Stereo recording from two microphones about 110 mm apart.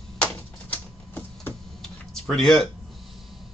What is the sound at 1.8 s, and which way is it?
Tick-tock, 5° left (ahead or behind).